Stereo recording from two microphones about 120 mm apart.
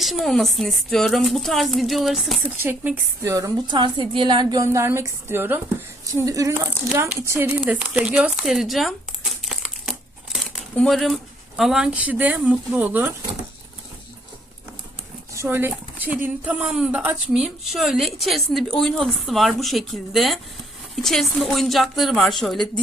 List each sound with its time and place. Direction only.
0.0 s speech: centre (ahead or behind)
2.6 s speech: 15° right (ahead or behind)
3.3 s speech: 30° right (ahead or behind)
3.8 s a woman's voice: 45° right (ahead or behind)
4.6 s speech: 25° right (ahead or behind)
15.4 s speech: 20° right (ahead or behind); by 22.6 s centre (ahead or behind)